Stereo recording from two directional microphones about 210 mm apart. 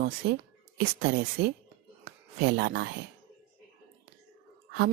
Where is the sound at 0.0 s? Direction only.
45° right (ahead or behind).